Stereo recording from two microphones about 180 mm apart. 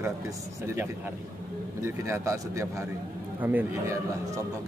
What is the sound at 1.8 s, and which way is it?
A man's voice, 15° right (ahead or behind).